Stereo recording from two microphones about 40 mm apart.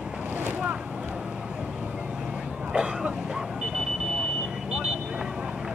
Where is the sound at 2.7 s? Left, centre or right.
Right.